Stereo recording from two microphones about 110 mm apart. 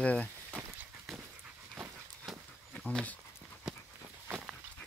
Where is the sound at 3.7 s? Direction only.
5° right (ahead or behind).